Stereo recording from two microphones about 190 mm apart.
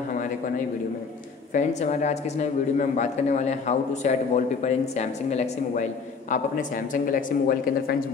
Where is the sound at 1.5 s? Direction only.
40° left (ahead or behind).